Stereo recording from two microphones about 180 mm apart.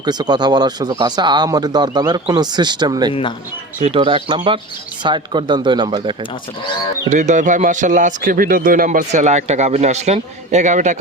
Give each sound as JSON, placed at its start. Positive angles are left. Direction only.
{"t": 0.0, "sound": "speech", "side_deg": -25}
{"t": 3.1, "sound": "speech", "side_deg": 30}
{"t": 3.8, "sound": "speech", "side_deg": -35}
{"t": 7.1, "sound": "a man's voice", "side_deg": -40}